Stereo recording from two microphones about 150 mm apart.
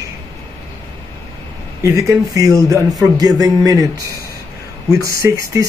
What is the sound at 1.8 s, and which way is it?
Speech, 20° right (ahead or behind).